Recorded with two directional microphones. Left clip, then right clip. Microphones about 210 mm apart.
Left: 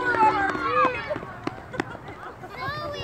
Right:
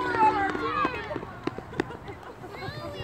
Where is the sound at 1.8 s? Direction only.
30° left (ahead or behind).